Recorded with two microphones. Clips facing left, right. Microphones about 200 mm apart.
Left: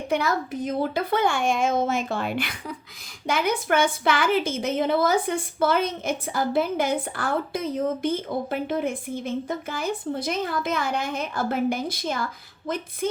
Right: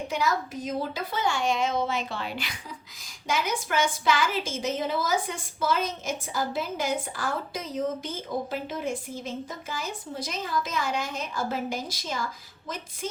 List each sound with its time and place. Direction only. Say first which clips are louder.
0.1 s a woman's voice: left 5 dB; 55° left (ahead or behind)